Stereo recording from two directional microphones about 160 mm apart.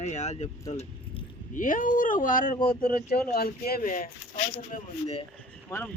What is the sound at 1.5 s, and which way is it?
Speech, 55° left (ahead or behind).